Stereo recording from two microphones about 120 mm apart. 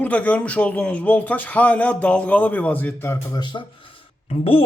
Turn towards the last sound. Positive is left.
turn(degrees=50)  # may be behind; listen again after turning